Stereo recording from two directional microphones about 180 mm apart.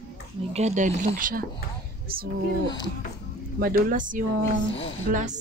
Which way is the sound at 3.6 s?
55° right (ahead or behind).